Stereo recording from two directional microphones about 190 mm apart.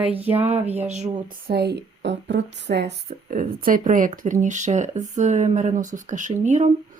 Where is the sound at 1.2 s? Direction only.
50° right (ahead or behind).